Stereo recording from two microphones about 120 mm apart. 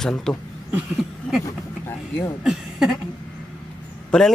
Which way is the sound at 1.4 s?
20° left (ahead or behind).